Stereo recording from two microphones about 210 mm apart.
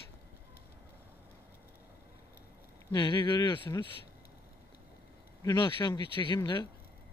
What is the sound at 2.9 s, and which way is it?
Speech, 20° left (ahead or behind).